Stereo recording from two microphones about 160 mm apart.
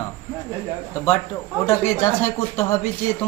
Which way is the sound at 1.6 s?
15° left (ahead or behind).